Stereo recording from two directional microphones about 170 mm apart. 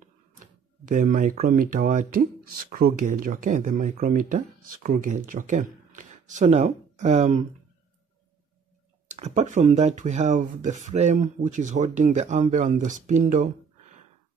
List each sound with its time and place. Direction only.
0.4 s speech: 50° right (ahead or behind)
9.0 s speech: 45° right (ahead or behind)